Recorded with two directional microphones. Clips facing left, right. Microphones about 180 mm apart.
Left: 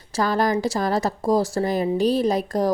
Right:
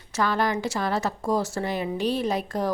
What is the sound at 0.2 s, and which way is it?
Speech, 40° left (ahead or behind).